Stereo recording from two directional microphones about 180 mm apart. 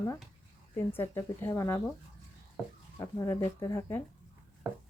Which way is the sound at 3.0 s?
15° left (ahead or behind).